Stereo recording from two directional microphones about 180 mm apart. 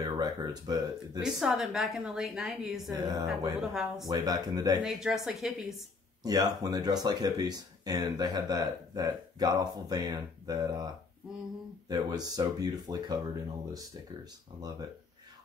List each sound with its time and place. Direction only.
0.0 s speech: 20° right (ahead or behind)
1.2 s a woman's voice: centre (ahead or behind)
3.0 s speech: 20° right (ahead or behind)
3.7 s a woman's voice: centre (ahead or behind)
4.1 s speech: 20° right (ahead or behind)
4.8 s a woman's voice: centre (ahead or behind)
6.2 s speech: 20° right (ahead or behind)
11.9 s speech: 20° right (ahead or behind)